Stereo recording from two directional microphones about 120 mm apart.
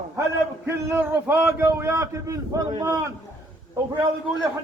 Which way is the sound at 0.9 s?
20° right (ahead or behind).